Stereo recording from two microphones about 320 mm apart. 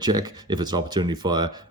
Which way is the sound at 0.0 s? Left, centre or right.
Centre.